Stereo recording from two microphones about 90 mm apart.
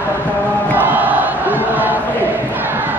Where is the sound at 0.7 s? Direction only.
20° right (ahead or behind).